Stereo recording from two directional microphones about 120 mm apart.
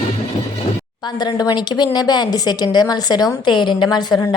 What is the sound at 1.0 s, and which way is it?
A woman's voice, 35° left (ahead or behind).